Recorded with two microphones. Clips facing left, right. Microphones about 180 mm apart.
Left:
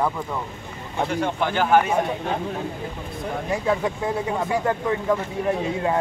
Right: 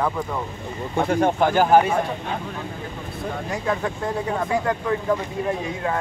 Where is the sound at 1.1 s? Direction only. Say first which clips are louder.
Right 6 dB; 50° right (ahead or behind).